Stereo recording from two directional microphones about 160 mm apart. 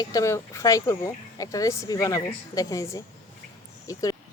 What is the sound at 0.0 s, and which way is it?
Speech, 20° left (ahead or behind).